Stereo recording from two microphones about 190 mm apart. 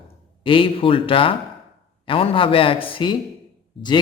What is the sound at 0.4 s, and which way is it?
Speech, 25° left (ahead or behind).